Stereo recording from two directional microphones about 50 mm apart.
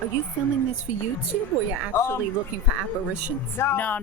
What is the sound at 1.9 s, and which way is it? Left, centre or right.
Speech, left.